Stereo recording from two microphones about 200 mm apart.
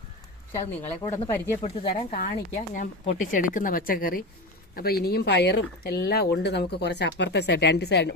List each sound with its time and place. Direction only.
1.1 s speech: 10° left (ahead or behind)
1.6 s speech: 35° left (ahead or behind); by 8.1 s 60° left (ahead or behind)